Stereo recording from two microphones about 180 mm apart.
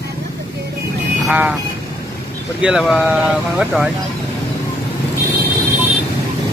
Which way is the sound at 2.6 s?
5° right (ahead or behind).